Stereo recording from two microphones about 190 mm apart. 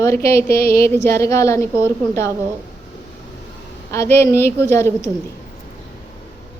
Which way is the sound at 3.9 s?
15° left (ahead or behind).